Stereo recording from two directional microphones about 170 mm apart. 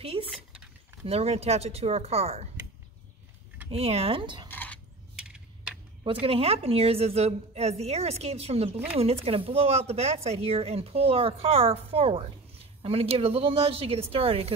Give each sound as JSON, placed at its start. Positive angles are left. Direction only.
{"t": 0.0, "sound": "a woman's voice", "side_deg": -35}
{"t": 3.7, "sound": "a woman's voice", "side_deg": -35}
{"t": 4.5, "sound": "a sound", "side_deg": 10}
{"t": 6.2, "sound": "a woman's voice", "side_deg": -35}